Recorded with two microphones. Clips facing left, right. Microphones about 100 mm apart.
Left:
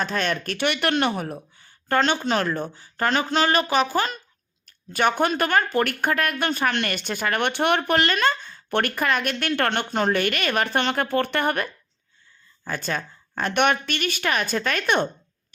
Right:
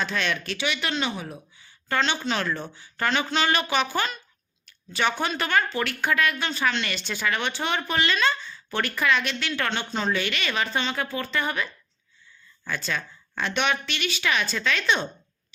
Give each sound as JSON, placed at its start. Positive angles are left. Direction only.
{"t": 0.0, "sound": "speech", "side_deg": 40}
{"t": 1.5, "sound": "a sound", "side_deg": 45}
{"t": 2.2, "sound": "speech", "side_deg": 45}
{"t": 12.6, "sound": "speech", "side_deg": 40}